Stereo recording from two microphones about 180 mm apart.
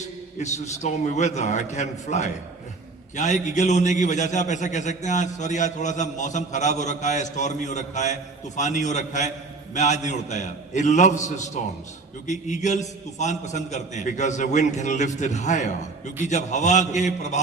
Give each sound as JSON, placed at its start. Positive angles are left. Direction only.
{"t": 0.3, "sound": "a man's voice", "side_deg": 40}
{"t": 12.3, "sound": "a man's voice", "side_deg": 40}